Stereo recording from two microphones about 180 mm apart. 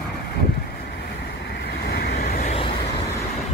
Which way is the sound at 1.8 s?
60° left (ahead or behind).